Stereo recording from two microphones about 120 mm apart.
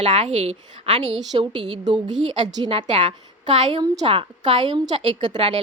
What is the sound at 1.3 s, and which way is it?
A woman's voice, 45° right (ahead or behind).